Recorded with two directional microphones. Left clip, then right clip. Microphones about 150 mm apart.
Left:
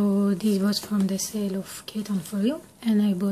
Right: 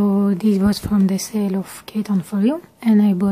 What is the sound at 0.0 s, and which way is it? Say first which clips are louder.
Speech: right 6 dB; 30° right (ahead or behind).